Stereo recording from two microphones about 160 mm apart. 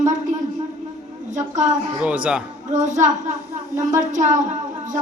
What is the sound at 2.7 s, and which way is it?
Speech, 50° right (ahead or behind).